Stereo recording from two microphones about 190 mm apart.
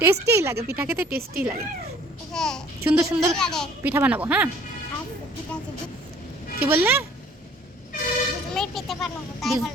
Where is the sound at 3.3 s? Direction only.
Centre (ahead or behind).